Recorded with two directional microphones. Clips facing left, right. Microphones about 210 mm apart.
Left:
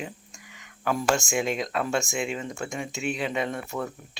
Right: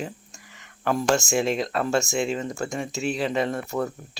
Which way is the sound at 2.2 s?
35° right (ahead or behind).